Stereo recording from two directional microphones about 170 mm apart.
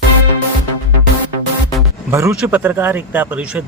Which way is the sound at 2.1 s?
15° right (ahead or behind).